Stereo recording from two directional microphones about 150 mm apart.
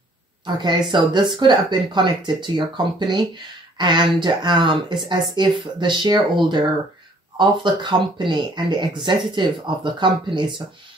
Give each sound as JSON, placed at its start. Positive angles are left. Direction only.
{"t": 0.6, "sound": "speech", "side_deg": -30}
{"t": 7.3, "sound": "speech", "side_deg": -30}